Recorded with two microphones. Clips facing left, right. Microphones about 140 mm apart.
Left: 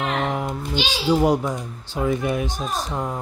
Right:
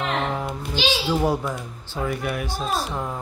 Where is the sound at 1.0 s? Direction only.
15° left (ahead or behind).